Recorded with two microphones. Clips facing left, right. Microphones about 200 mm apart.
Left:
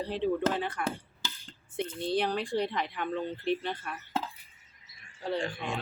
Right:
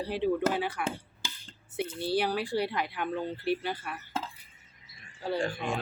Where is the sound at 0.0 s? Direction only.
10° right (ahead or behind).